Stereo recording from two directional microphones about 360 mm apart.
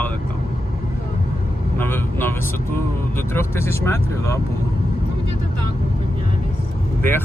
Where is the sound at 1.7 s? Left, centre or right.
Centre.